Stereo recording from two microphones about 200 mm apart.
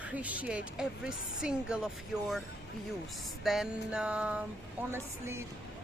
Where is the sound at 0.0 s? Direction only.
5° right (ahead or behind).